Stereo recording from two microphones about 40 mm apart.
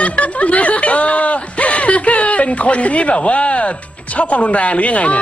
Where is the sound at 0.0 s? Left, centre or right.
Left.